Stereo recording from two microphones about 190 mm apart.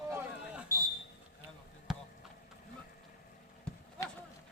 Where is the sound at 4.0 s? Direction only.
15° left (ahead or behind).